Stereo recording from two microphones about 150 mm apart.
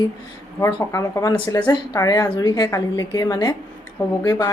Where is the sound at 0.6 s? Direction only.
20° left (ahead or behind).